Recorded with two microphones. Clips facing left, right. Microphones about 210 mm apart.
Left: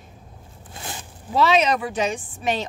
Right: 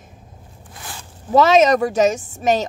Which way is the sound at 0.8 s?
25° left (ahead or behind).